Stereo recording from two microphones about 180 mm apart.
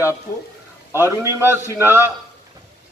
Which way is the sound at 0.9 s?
15° right (ahead or behind).